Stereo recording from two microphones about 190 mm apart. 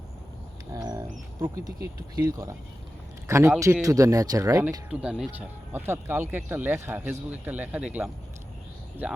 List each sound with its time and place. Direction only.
0.7 s bird: 20° right (ahead or behind)
1.4 s speech: 15° right (ahead or behind)
4.9 s speech: 5° right (ahead or behind)